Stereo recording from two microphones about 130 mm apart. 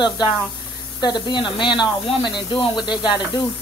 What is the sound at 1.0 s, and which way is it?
Speech, 35° left (ahead or behind).